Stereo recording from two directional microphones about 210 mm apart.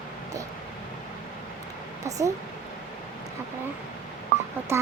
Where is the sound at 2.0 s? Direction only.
15° right (ahead or behind).